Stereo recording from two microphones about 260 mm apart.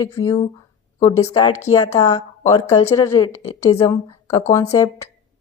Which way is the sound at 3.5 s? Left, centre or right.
Left.